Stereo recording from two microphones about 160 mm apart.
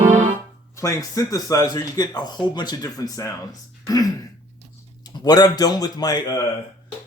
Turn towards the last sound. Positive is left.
turn(degrees=25)  # may be behind; listen again after turning